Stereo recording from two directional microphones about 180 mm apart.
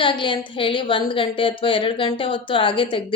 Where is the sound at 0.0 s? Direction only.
30° left (ahead or behind).